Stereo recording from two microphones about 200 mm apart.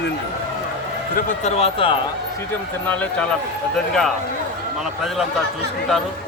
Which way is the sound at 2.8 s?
5° left (ahead or behind).